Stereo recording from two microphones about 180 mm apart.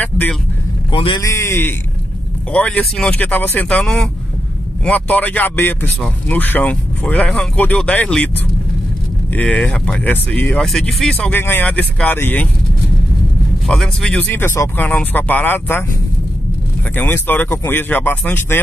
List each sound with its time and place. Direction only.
0.0 s vehicle: 10° left (ahead or behind)
0.9 s speech: 30° left (ahead or behind)
1.2 s speech: 15° left (ahead or behind)
9.3 s speech: 10° left (ahead or behind)
13.7 s speech: 5° left (ahead or behind)
16.9 s speech: 10° left (ahead or behind)